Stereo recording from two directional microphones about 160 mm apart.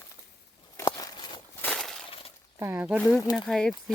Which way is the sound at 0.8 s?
25° left (ahead or behind).